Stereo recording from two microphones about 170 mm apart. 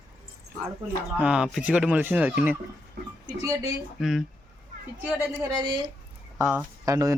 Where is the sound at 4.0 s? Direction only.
Centre (ahead or behind).